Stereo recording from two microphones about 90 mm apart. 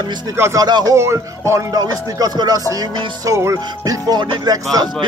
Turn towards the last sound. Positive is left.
turn(degrees=-45)  # may be behind; listen again after turning